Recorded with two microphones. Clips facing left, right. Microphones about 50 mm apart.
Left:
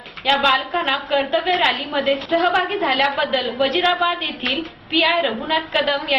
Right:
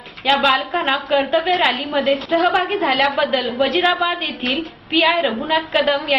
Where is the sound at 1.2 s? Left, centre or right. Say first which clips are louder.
Even; centre.